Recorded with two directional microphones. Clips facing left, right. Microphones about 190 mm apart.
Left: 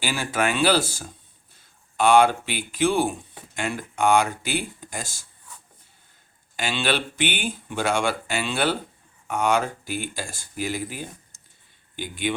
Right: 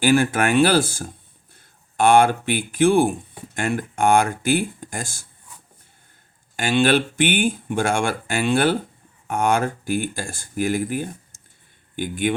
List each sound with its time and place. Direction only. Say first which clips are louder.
0.0 s speech: right 8 dB; 55° right (ahead or behind)
6.6 s speech: right 7 dB; 50° right (ahead or behind)